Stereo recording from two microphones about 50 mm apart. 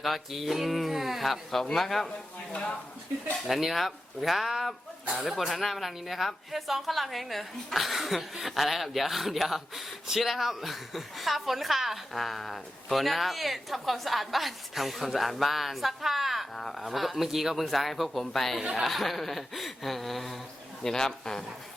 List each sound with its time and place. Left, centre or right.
0.0 s a woman's voice: centre
2.5 s speech: left
3.4 s a woman's voice: centre